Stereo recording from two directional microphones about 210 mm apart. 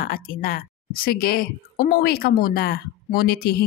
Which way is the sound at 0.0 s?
45° left (ahead or behind).